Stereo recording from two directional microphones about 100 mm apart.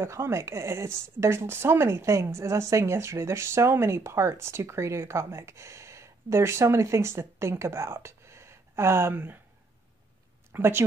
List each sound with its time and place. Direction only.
0.0 s speech: 25° right (ahead or behind)
10.5 s speech: 20° right (ahead or behind)